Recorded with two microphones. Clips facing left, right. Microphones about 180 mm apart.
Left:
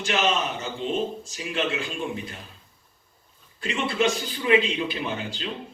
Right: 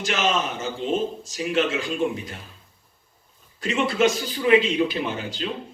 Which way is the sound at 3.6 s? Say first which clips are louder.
Right 4 dB; 40° right (ahead or behind).